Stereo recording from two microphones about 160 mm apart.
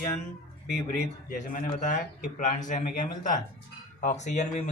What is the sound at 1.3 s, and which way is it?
Speech, 60° left (ahead or behind).